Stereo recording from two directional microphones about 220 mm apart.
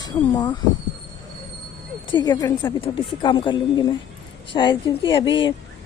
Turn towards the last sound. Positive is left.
turn(degrees=20)  # may be behind; listen again after turning